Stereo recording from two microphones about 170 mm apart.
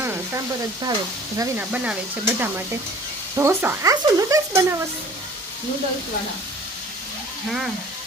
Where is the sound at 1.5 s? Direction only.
5° right (ahead or behind).